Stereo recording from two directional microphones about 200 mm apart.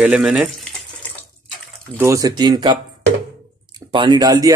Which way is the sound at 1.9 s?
15° right (ahead or behind).